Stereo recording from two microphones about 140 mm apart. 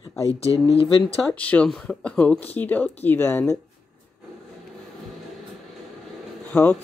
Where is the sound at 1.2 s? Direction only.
10° left (ahead or behind).